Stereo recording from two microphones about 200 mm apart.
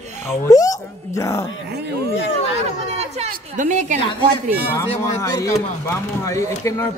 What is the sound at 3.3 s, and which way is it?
A woman's voice, 40° right (ahead or behind).